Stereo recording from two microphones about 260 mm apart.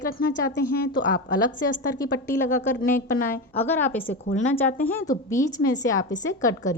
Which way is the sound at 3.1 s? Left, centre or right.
Left.